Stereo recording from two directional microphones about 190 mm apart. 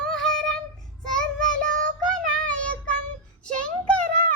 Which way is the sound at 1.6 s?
45° right (ahead or behind).